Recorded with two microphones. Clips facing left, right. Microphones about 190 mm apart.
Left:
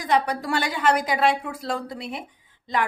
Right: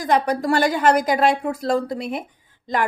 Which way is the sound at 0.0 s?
45° right (ahead or behind).